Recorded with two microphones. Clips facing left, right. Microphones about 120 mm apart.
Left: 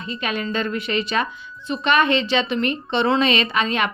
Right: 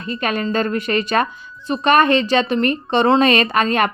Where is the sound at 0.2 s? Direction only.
45° right (ahead or behind).